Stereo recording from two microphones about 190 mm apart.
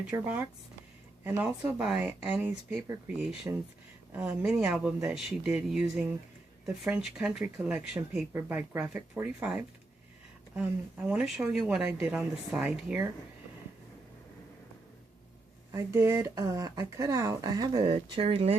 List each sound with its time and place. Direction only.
0.1 s speech: 10° right (ahead or behind)
15.7 s speech: 15° right (ahead or behind); by 18.5 s 30° right (ahead or behind)